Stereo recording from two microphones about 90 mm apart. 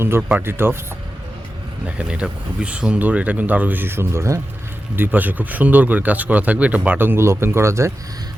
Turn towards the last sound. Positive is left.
turn(degrees=-30)  # may be behind; listen again after turning